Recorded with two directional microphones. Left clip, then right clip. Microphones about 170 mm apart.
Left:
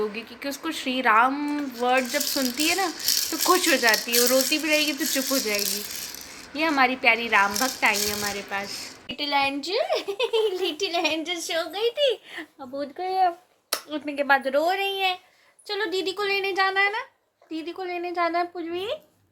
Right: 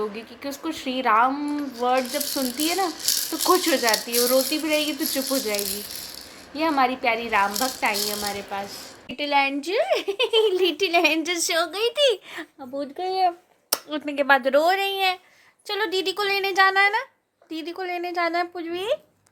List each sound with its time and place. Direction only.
0.0 s speech: centre (ahead or behind)
9.1 s speech: 40° right (ahead or behind); by 12.2 s 55° right (ahead or behind)
12.3 s speech: 35° right (ahead or behind)